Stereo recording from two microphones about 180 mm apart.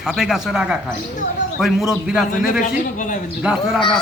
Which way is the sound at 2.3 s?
45° left (ahead or behind).